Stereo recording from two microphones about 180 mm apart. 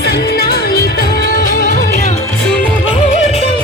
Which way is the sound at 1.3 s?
50° left (ahead or behind).